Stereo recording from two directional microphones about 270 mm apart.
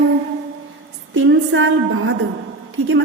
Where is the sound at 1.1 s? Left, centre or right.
Right.